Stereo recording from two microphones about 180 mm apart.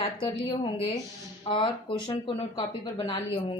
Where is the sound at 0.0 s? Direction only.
25° left (ahead or behind).